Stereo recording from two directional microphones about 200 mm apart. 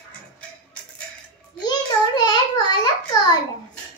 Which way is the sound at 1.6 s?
20° left (ahead or behind).